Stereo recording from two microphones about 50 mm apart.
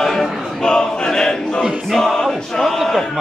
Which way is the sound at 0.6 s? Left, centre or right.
Centre.